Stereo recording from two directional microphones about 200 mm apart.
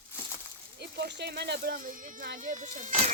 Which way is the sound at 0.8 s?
55° right (ahead or behind).